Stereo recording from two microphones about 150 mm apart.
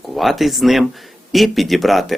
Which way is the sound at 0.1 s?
Centre (ahead or behind).